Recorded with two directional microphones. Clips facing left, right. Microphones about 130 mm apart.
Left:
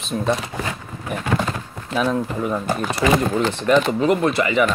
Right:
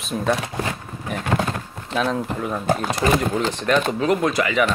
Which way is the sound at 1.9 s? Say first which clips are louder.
Left 2 dB; 5° left (ahead or behind).